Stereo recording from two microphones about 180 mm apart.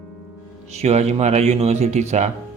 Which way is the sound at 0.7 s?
35° right (ahead or behind).